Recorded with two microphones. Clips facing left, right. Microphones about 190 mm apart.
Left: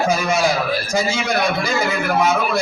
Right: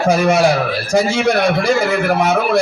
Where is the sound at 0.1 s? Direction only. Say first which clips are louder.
Right 5 dB; 65° right (ahead or behind).